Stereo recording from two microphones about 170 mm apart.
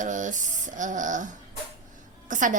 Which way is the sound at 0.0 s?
50° right (ahead or behind).